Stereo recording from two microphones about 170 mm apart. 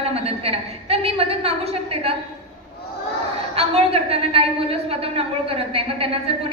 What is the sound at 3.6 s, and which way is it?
A woman's voice, 35° right (ahead or behind).